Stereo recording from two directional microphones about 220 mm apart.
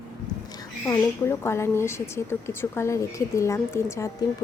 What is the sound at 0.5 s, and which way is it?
A woman's voice, 15° left (ahead or behind).